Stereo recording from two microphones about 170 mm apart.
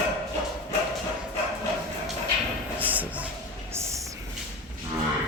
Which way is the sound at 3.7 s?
15° right (ahead or behind).